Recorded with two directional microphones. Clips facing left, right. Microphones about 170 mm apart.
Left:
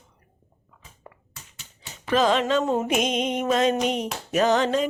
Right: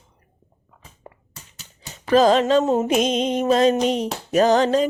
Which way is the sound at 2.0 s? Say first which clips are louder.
Right 6 dB; 40° right (ahead or behind).